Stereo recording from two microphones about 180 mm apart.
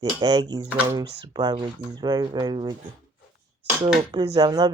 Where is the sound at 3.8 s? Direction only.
25° right (ahead or behind).